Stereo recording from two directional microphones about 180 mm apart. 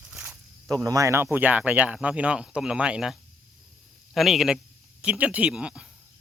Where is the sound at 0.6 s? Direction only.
20° right (ahead or behind).